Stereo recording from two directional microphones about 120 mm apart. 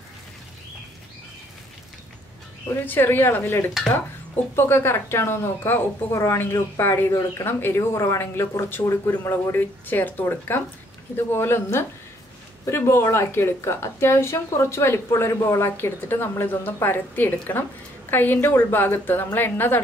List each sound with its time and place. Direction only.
2.7 s a woman's voice: 15° left (ahead or behind)